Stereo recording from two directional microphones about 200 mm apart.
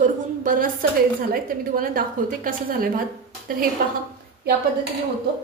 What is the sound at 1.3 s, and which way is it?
Speech, 45° right (ahead or behind).